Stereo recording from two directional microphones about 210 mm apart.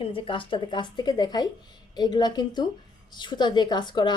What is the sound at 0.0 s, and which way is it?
Speech, 25° left (ahead or behind).